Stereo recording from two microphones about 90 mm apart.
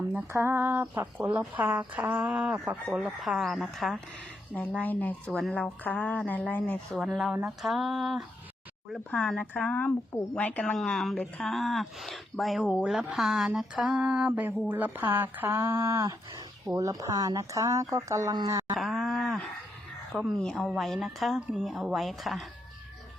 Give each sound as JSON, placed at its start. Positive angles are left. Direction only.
{"t": 0.1, "sound": "speech", "side_deg": -25}
{"t": 4.8, "sound": "speech", "side_deg": 20}
{"t": 6.9, "sound": "speech", "side_deg": 0}
{"t": 16.6, "sound": "speech", "side_deg": -40}
{"t": 18.8, "sound": "groan", "side_deg": 0}
{"t": 20.1, "sound": "speech", "side_deg": 0}